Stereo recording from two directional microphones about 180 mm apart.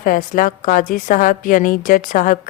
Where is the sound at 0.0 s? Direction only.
50° left (ahead or behind).